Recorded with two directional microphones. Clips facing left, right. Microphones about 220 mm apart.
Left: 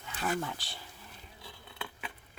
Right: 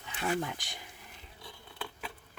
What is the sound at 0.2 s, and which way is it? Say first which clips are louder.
Speech: right 1 dB; 20° right (ahead or behind).